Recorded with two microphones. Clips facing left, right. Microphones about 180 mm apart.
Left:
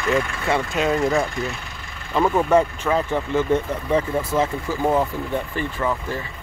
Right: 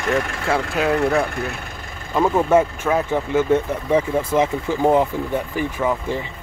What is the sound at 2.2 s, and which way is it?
Speech, 10° right (ahead or behind).